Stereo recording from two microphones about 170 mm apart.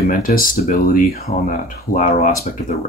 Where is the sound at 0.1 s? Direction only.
55° left (ahead or behind).